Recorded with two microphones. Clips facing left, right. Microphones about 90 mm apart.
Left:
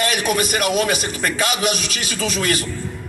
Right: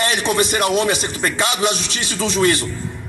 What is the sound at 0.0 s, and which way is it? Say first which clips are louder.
Speech: right 1 dB; 30° right (ahead or behind).